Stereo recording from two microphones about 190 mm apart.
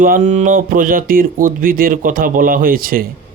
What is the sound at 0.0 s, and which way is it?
Speech, 40° right (ahead or behind).